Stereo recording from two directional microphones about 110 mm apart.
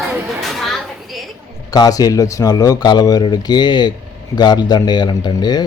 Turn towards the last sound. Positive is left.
turn(degrees=40)  # may be behind; listen again after turning